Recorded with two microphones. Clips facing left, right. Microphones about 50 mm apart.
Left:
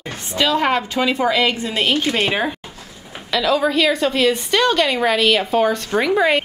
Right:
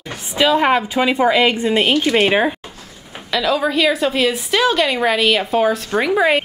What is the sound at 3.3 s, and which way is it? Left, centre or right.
Speech, centre.